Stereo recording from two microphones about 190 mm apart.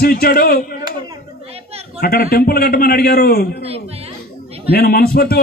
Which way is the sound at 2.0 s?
55° left (ahead or behind).